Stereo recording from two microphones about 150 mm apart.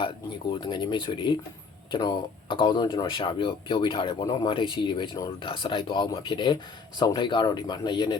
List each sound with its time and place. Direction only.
0.5 s speech: 30° left (ahead or behind)